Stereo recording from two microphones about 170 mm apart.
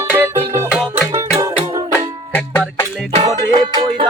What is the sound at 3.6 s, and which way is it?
Music, 25° right (ahead or behind).